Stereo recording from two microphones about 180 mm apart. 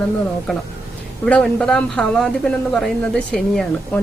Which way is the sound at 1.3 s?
5° left (ahead or behind).